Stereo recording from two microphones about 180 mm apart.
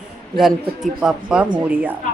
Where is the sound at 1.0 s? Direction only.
5° right (ahead or behind).